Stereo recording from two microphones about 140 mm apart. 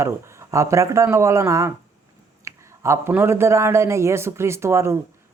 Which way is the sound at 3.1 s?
15° right (ahead or behind).